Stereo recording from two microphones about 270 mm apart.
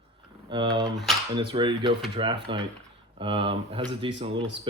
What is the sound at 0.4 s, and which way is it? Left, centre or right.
Speech, centre.